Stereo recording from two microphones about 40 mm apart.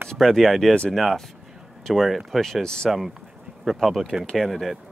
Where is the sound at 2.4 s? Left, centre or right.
Centre.